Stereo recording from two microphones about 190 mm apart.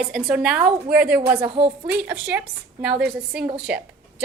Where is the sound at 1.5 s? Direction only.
30° right (ahead or behind).